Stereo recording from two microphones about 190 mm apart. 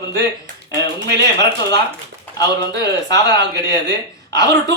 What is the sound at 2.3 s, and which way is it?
A man's voice, 20° left (ahead or behind).